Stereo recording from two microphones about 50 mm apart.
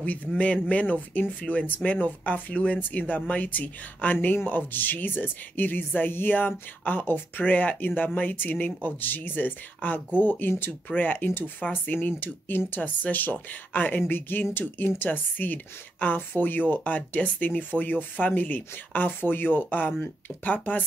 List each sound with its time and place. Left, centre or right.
0.4 s speech: left